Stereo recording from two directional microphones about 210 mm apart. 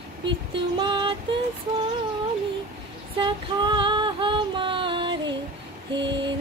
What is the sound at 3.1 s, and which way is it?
Female singing, 20° right (ahead or behind).